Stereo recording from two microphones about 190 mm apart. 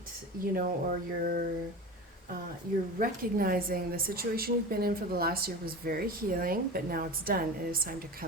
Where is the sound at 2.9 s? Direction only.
50° right (ahead or behind).